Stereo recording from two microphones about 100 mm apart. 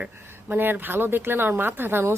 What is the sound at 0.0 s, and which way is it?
Speech, 20° right (ahead or behind).